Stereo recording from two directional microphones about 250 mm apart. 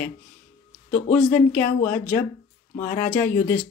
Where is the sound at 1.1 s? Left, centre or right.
Centre.